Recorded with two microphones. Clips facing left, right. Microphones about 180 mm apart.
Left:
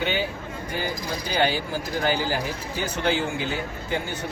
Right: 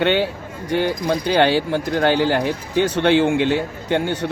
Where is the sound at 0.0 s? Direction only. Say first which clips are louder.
Right 8 dB; 75° right (ahead or behind).